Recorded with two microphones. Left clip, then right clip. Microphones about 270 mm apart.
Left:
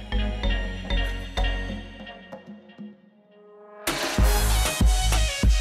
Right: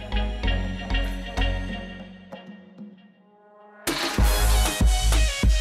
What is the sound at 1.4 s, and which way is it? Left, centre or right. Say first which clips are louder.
Music: even; centre.